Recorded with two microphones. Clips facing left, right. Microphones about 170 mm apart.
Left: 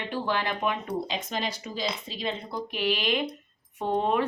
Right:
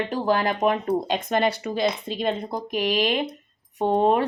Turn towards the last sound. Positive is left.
turn(degrees=-35)  # may be behind; listen again after turning